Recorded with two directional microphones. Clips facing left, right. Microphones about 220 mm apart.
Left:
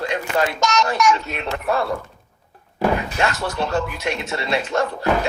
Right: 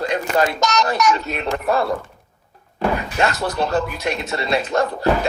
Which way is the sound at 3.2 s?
35° right (ahead or behind).